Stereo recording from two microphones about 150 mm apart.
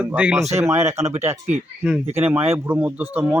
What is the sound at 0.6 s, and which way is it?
Speech, 20° right (ahead or behind).